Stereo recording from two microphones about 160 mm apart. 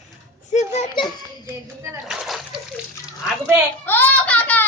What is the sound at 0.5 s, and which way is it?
Speech, 45° left (ahead or behind).